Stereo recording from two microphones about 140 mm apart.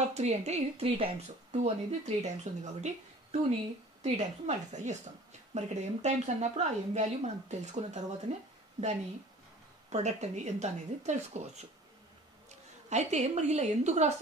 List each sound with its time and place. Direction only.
0.1 s a woman's voice: 50° right (ahead or behind)
9.8 s a woman's voice: 55° right (ahead or behind)